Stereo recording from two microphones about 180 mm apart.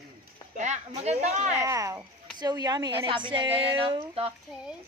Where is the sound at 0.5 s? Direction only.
40° right (ahead or behind).